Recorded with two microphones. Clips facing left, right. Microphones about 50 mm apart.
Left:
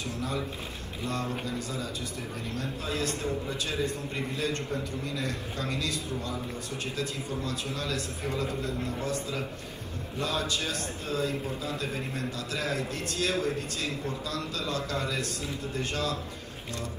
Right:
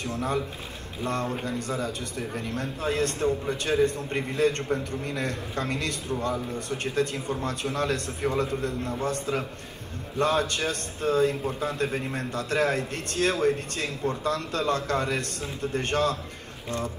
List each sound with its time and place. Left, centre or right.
0.0 s a man's voice: right